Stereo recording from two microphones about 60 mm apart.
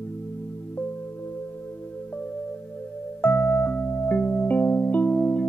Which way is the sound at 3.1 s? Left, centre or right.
Left.